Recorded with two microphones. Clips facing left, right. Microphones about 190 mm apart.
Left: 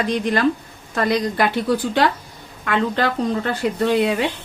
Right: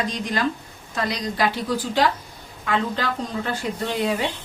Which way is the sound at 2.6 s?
65° left (ahead or behind).